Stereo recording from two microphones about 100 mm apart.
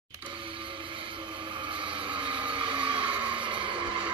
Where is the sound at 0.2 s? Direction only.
55° right (ahead or behind).